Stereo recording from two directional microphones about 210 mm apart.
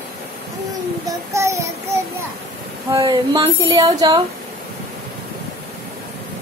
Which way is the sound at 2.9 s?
20° right (ahead or behind).